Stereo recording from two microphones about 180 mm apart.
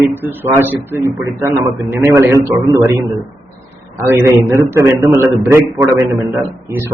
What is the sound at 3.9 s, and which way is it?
A man's voice, 15° right (ahead or behind).